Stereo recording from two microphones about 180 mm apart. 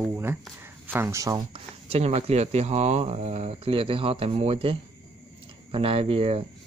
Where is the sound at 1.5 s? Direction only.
35° right (ahead or behind).